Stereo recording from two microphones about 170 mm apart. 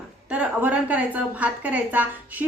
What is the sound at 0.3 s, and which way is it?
A woman's voice, 10° right (ahead or behind).